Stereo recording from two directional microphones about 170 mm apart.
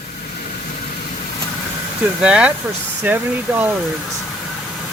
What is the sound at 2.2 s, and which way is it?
Speech, 5° right (ahead or behind).